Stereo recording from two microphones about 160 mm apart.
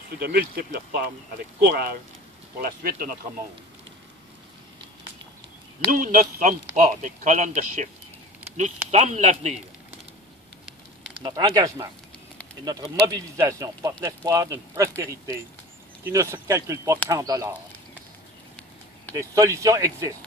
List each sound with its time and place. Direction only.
0.2 s speech: 75° right (ahead or behind)
2.6 s speech: 65° right (ahead or behind)
5.9 s a man's voice: 55° right (ahead or behind)
11.2 s speech: 25° right (ahead or behind)
19.1 s speech: 20° right (ahead or behind)